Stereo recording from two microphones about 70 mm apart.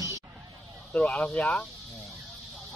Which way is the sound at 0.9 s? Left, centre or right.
Centre.